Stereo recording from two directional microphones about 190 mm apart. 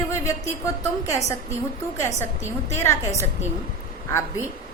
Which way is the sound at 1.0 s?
15° left (ahead or behind).